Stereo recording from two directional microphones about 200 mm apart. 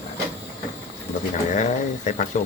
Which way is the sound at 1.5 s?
40° left (ahead or behind).